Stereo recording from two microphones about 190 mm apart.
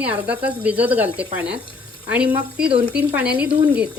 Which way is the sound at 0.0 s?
10° right (ahead or behind).